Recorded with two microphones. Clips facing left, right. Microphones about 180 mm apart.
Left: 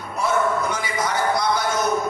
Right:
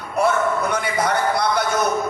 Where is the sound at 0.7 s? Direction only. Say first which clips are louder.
Right 4 dB; 60° right (ahead or behind).